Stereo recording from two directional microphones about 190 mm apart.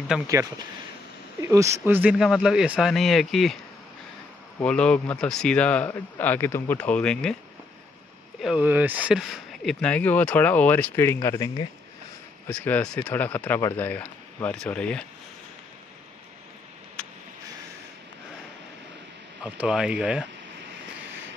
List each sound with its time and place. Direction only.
0.3 s speech: 15° right (ahead or behind); by 3.5 s centre (ahead or behind)
4.6 s speech: 5° left (ahead or behind)
8.4 s speech: 5° right (ahead or behind)
19.4 s speech: 5° right (ahead or behind)